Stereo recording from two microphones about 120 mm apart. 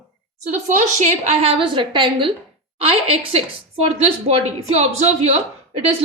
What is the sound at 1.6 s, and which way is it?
Speech, 45° right (ahead or behind).